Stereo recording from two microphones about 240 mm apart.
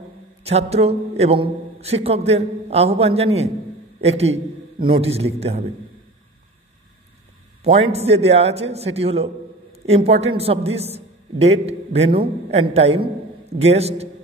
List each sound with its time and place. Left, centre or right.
0.4 s a man's voice: right
7.6 s a man's voice: right